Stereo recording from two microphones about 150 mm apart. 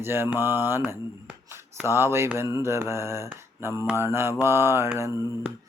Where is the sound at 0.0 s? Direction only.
15° right (ahead or behind).